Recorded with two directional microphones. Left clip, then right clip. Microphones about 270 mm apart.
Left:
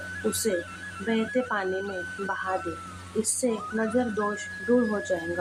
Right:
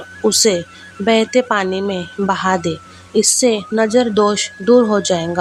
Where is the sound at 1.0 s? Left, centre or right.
Right.